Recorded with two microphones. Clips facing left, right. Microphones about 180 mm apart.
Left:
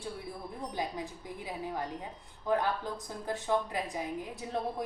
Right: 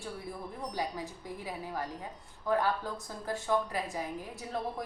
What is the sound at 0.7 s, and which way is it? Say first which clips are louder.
Speech: even; 20° left (ahead or behind).